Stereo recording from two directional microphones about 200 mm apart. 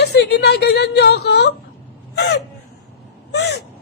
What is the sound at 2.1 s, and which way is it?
Chicken, 60° left (ahead or behind).